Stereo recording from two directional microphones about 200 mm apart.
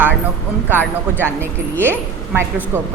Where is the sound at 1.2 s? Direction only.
10° right (ahead or behind).